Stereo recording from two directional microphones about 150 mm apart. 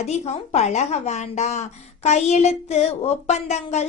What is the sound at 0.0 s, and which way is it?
A woman's voice, 45° left (ahead or behind).